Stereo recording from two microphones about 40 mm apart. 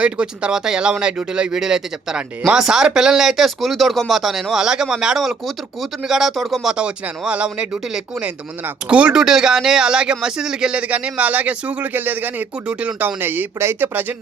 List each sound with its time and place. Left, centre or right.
0.0 s speech: right
0.5 s speech: centre
4.6 s speech: centre
5.1 s speech: centre
6.7 s speech: right
8.9 s speech: right
9.1 s speech: centre
10.8 s speech: right
11.9 s speech: right
13.1 s speech: right